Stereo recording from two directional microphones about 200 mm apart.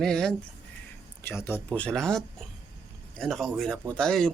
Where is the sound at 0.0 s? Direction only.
5° left (ahead or behind).